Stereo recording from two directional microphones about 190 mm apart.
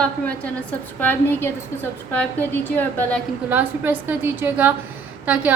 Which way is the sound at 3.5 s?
10° right (ahead or behind).